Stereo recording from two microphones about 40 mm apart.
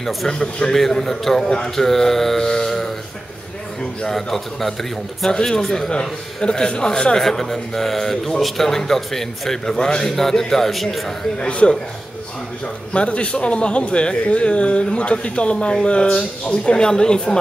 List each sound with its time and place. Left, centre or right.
0.3 s speech: centre
4.0 s a man's voice: centre
5.9 s speech: left
11.3 s speech: left
12.9 s speech: left